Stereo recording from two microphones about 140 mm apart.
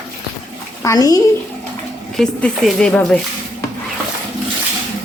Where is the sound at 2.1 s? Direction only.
5° left (ahead or behind).